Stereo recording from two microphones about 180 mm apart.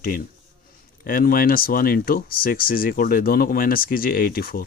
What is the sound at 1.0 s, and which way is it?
Speech, 50° left (ahead or behind).